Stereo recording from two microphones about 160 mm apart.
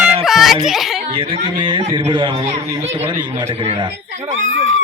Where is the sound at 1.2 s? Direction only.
30° right (ahead or behind).